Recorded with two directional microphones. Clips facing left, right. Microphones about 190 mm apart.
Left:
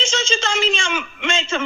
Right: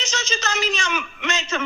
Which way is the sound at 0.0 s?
25° left (ahead or behind).